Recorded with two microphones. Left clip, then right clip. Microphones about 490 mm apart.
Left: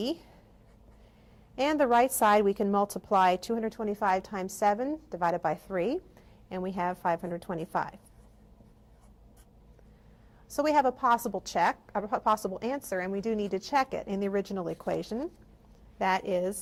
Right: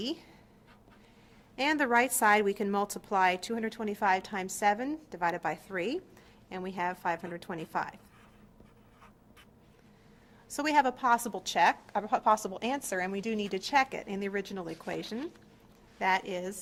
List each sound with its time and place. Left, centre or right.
0.0 s speech: left
1.5 s a woman's voice: left
6.5 s a woman's voice: left
10.5 s a woman's voice: left